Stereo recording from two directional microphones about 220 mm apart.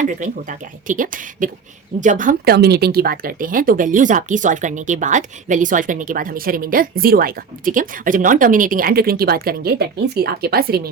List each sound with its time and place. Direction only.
0.0 s speech: 35° right (ahead or behind)